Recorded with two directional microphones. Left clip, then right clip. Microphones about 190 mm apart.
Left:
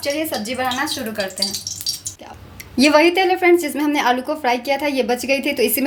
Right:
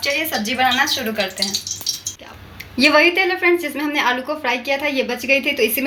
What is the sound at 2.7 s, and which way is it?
A woman's voice, 70° left (ahead or behind).